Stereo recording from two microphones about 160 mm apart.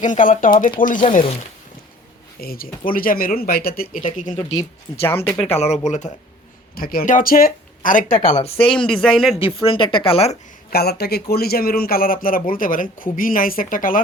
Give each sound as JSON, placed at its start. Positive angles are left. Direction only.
{"t": 0.0, "sound": "a man's voice", "side_deg": 55}
{"t": 2.4, "sound": "a man's voice", "side_deg": 70}
{"t": 4.3, "sound": "speech", "side_deg": 25}
{"t": 5.5, "sound": "speech", "side_deg": 45}
{"t": 6.7, "sound": "a man's voice", "side_deg": 65}
{"t": 8.4, "sound": "speech", "side_deg": 35}
{"t": 8.9, "sound": "a man's voice", "side_deg": 5}
{"t": 9.4, "sound": "speech", "side_deg": 35}
{"t": 10.7, "sound": "a man's voice", "side_deg": 75}